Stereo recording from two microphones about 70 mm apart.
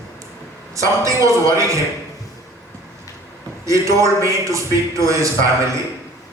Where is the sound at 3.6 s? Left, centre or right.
Right.